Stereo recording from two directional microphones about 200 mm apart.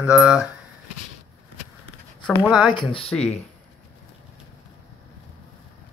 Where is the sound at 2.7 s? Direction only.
25° left (ahead or behind).